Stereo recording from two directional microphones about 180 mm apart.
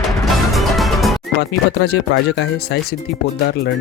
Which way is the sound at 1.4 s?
65° left (ahead or behind).